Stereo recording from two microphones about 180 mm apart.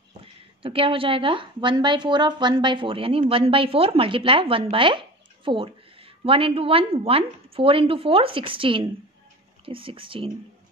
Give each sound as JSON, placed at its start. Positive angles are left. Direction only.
{"t": 0.2, "sound": "speech", "side_deg": -30}